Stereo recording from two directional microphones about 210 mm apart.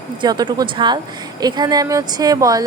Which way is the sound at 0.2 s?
20° right (ahead or behind).